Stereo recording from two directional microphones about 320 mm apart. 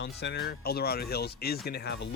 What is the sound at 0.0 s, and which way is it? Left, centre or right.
Speech, left.